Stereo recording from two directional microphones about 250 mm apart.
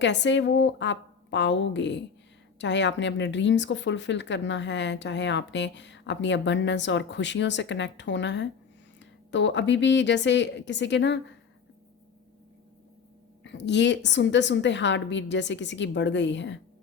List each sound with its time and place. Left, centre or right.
0.0 s a woman's voice: left
13.4 s a woman's voice: left